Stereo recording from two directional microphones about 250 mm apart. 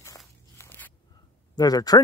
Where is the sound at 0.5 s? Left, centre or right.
Centre.